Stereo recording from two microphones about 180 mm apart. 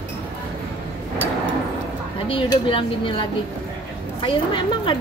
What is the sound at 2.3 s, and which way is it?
A woman's voice, 30° left (ahead or behind).